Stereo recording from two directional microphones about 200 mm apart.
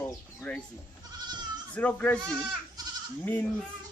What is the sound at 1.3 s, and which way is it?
Goat, 20° right (ahead or behind).